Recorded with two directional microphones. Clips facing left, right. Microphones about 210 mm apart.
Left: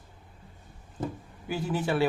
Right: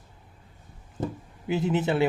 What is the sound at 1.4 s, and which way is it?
Speech, 20° right (ahead or behind).